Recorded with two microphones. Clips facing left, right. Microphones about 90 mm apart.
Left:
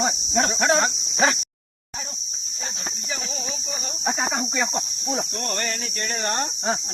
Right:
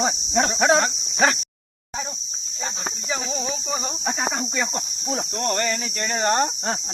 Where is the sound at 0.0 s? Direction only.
Centre (ahead or behind).